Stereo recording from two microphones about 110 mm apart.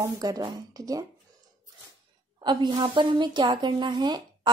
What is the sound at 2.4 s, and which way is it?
A woman's voice, 40° right (ahead or behind).